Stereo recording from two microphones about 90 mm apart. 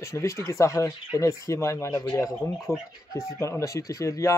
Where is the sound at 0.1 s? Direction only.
35° left (ahead or behind).